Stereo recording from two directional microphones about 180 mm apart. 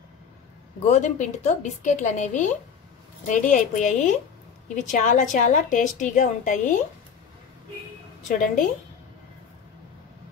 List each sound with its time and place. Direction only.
0.8 s a woman's voice: 40° left (ahead or behind)
8.3 s a woman's voice: 45° left (ahead or behind)